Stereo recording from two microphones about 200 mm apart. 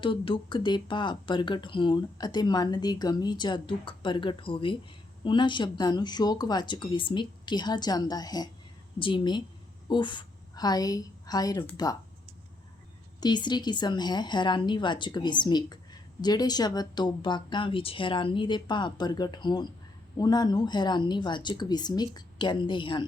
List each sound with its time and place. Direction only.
0.0 s a woman's voice: 25° left (ahead or behind)
13.1 s a woman's voice: 20° left (ahead or behind)